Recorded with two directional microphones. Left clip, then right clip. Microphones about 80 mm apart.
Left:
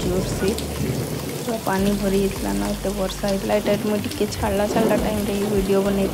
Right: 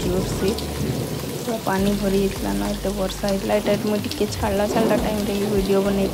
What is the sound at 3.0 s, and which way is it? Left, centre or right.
Speech, centre.